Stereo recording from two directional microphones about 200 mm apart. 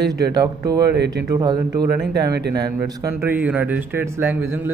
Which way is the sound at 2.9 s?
15° right (ahead or behind).